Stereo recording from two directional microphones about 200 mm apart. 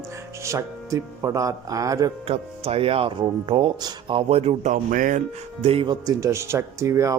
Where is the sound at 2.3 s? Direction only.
30° right (ahead or behind).